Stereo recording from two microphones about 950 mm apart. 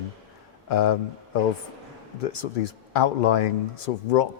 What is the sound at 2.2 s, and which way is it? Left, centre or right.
Speech, left.